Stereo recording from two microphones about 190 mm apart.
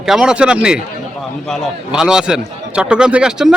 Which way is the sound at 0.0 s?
5° right (ahead or behind).